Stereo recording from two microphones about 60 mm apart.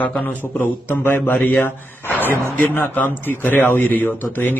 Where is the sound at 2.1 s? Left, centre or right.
Left.